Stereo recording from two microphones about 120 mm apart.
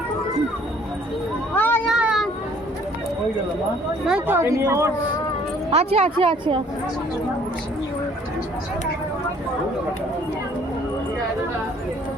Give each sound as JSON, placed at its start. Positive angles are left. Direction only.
{"t": 1.5, "sound": "a sound", "side_deg": 15}
{"t": 1.9, "sound": "vehicle", "side_deg": -5}
{"t": 4.3, "sound": "a woman's voice", "side_deg": -20}
{"t": 5.7, "sound": "speech", "side_deg": -55}